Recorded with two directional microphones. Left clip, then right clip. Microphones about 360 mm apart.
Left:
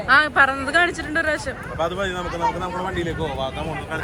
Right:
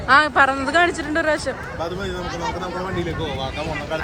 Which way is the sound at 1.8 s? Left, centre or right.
Centre.